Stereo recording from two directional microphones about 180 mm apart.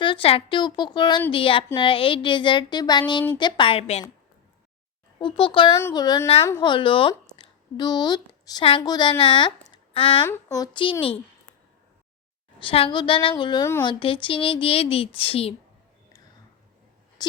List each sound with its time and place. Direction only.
0.0 s a woman's voice: 30° left (ahead or behind)
5.2 s a woman's voice: 30° left (ahead or behind)
10.2 s speech: 15° left (ahead or behind)
12.5 s a woman's voice: 30° left (ahead or behind)
17.2 s a sound: 20° left (ahead or behind)